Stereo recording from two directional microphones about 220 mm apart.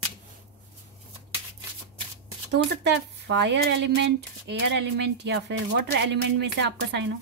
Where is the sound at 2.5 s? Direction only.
50° right (ahead or behind).